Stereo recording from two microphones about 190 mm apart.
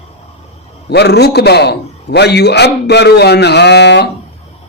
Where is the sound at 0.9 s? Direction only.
60° left (ahead or behind).